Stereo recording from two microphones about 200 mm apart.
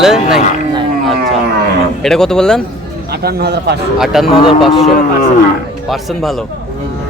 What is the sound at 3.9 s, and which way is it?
Speech, centre (ahead or behind).